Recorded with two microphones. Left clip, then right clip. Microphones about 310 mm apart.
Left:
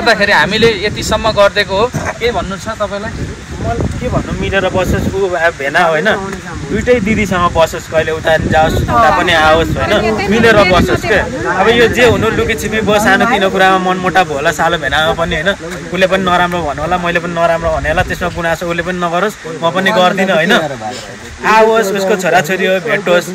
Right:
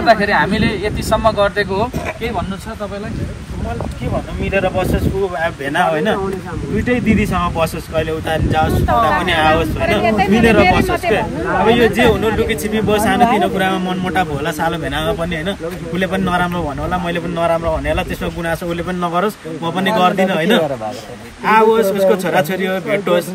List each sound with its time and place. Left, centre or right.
0.0 s speech: centre
4.5 s speech: centre
10.0 s speech: right
10.4 s speech: centre